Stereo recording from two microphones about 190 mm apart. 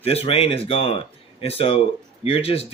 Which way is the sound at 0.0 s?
30° left (ahead or behind).